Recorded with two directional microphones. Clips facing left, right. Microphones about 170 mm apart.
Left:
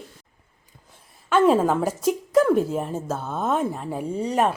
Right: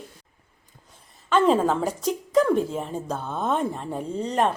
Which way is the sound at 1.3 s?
10° left (ahead or behind).